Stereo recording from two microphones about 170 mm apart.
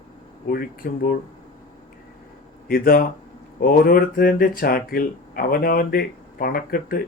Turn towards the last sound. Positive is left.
turn(degrees=60)  # may be behind; listen again after turning